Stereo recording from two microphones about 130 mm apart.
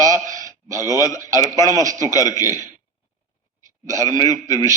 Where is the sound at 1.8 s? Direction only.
25° right (ahead or behind).